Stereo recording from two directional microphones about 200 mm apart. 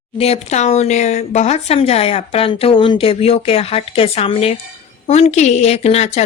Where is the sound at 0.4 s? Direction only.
35° left (ahead or behind).